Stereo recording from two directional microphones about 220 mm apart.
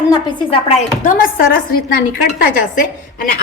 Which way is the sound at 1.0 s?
40° left (ahead or behind).